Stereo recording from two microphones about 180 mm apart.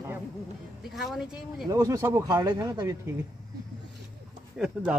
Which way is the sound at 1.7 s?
20° right (ahead or behind).